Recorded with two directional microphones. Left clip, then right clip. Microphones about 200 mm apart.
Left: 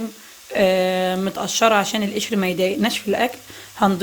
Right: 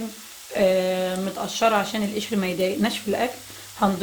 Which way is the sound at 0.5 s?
40° left (ahead or behind).